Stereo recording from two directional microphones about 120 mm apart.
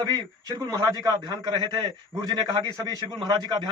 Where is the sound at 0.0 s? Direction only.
30° right (ahead or behind).